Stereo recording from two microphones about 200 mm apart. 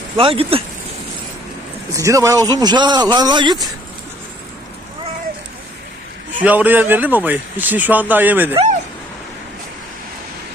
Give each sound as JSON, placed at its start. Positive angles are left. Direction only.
{"t": 0.2, "sound": "speech", "side_deg": -30}
{"t": 1.9, "sound": "speech", "side_deg": -15}
{"t": 6.4, "sound": "speech", "side_deg": -10}